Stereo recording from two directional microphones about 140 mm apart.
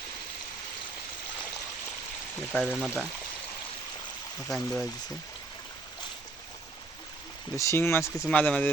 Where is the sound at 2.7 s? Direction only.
5° right (ahead or behind).